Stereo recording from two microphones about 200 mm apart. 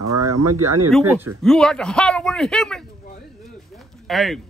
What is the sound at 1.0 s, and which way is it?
Speech, 10° right (ahead or behind).